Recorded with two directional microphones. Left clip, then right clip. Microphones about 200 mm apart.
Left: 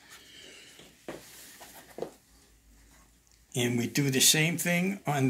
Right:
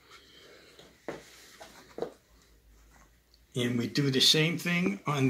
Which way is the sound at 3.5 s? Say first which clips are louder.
Left 1 dB; 35° left (ahead or behind).